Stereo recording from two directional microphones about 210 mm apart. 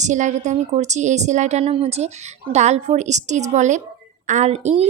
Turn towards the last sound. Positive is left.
turn(degrees=-30)  # may be behind; listen again after turning